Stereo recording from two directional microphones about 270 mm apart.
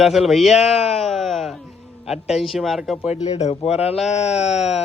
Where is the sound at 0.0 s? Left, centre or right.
Centre.